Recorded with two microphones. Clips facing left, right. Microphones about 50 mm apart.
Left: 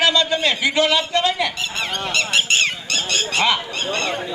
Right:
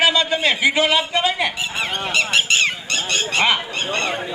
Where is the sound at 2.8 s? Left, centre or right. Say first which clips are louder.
Even; right.